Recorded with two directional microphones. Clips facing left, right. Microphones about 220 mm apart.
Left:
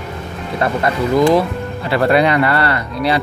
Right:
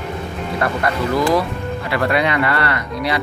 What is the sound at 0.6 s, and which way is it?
Speech, 25° left (ahead or behind).